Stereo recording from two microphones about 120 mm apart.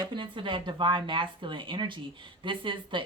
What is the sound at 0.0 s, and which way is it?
Speech, 40° right (ahead or behind).